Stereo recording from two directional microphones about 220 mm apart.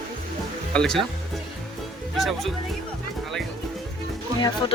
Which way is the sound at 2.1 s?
Centre (ahead or behind).